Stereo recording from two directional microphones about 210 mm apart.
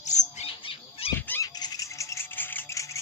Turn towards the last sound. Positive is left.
turn(degrees=15)  # may be behind; listen again after turning